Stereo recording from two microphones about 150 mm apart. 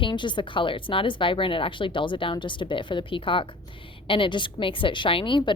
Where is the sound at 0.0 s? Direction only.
30° left (ahead or behind).